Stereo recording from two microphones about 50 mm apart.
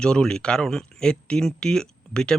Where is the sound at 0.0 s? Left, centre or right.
Centre.